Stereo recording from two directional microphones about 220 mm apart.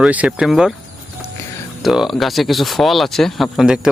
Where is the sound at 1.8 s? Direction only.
Centre (ahead or behind).